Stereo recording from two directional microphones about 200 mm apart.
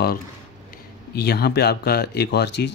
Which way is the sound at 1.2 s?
55° left (ahead or behind).